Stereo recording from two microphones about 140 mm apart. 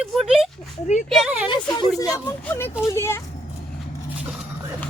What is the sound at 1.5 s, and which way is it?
Speech, 35° left (ahead or behind).